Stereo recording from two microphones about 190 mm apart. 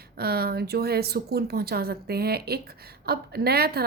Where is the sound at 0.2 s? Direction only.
55° right (ahead or behind).